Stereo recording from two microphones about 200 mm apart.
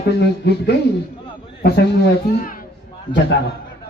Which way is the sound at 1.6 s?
55° left (ahead or behind).